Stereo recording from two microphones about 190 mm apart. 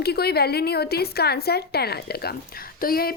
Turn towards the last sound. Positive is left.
turn(degrees=50)  # may be behind; listen again after turning